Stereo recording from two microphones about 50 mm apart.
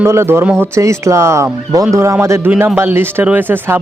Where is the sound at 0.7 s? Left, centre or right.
Right.